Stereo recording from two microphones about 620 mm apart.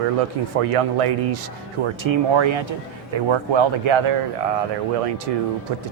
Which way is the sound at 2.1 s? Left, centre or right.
Right.